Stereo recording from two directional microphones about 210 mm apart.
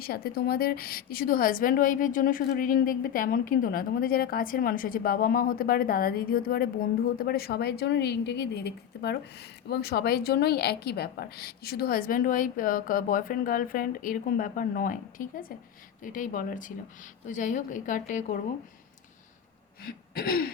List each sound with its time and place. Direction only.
0.0 s a woman's voice: 45° left (ahead or behind)
19.8 s gasp: 45° left (ahead or behind)